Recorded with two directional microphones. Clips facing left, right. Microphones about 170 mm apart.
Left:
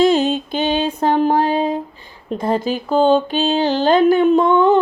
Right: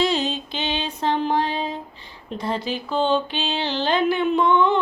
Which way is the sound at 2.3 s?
50° left (ahead or behind).